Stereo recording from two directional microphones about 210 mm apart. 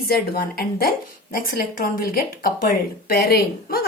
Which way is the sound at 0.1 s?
45° left (ahead or behind).